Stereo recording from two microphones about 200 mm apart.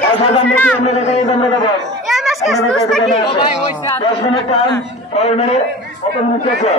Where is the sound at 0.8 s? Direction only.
35° left (ahead or behind).